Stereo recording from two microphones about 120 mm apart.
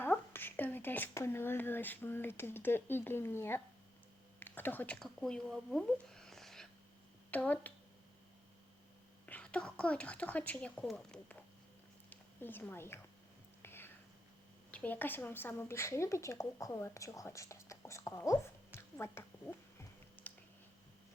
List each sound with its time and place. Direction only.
0.0 s speech: 15° left (ahead or behind)
7.3 s speech: 15° left (ahead or behind)
9.2 s a woman's voice: 10° left (ahead or behind)
13.6 s whispering: 20° left (ahead or behind)
14.7 s speech: 10° left (ahead or behind)